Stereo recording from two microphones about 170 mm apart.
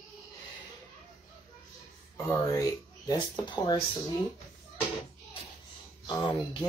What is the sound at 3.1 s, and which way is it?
Speech, 25° left (ahead or behind).